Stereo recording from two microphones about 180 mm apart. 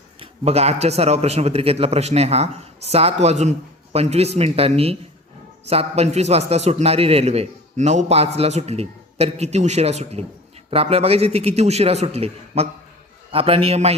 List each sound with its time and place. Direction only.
0.2 s a man's voice: 35° right (ahead or behind)